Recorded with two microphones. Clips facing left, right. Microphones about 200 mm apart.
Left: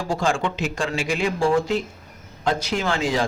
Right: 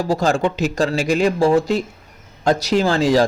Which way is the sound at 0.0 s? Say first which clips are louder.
Right 5 dB; 40° right (ahead or behind).